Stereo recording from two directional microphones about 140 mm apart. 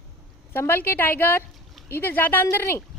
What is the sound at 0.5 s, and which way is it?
Speech, 15° left (ahead or behind).